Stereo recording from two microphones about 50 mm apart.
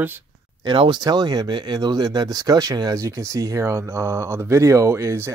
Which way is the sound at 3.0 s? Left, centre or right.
Right.